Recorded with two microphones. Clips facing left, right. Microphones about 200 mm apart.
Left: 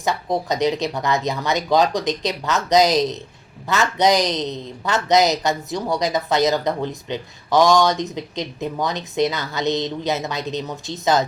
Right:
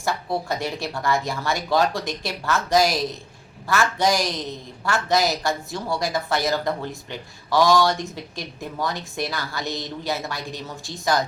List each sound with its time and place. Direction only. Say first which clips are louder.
0.0 s speech: left 3 dB; 20° left (ahead or behind)